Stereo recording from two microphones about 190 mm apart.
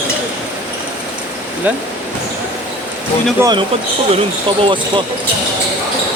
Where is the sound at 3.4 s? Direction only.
25° right (ahead or behind).